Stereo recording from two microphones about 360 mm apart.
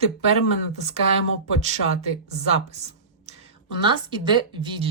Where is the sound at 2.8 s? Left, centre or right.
Centre.